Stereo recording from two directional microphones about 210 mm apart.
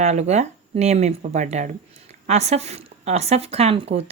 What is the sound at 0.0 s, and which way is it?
Speech, 35° right (ahead or behind).